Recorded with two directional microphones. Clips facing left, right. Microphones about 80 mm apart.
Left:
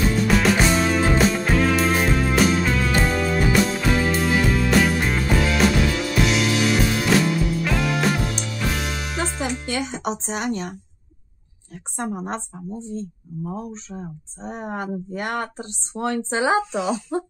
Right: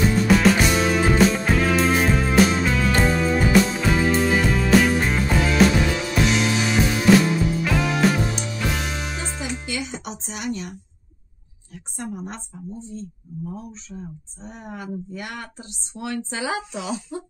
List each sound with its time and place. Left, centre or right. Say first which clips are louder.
0.3 s music: right 1 dB; centre
9.7 s music: left 5 dB; left
11.7 s a woman's voice: left 4 dB; left